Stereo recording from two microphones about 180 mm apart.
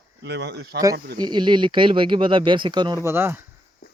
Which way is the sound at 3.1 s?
10° right (ahead or behind).